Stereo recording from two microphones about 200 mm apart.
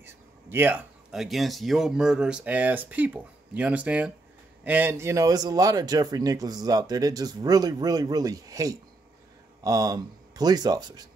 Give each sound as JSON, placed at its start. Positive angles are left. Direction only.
{"t": 0.0, "sound": "speech", "side_deg": -10}